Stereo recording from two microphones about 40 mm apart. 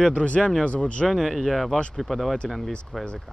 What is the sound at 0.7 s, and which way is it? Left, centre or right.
Speech, left.